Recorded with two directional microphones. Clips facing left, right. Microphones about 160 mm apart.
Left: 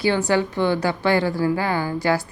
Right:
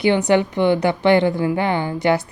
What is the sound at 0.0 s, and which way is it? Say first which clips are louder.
Speech: right 4 dB; 20° right (ahead or behind).